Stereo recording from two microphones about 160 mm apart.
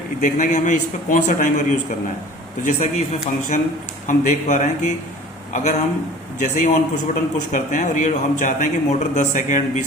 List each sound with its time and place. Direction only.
0.2 s a man's voice: 50° left (ahead or behind)
2.6 s a man's voice: 45° left (ahead or behind)
6.4 s a man's voice: 50° left (ahead or behind)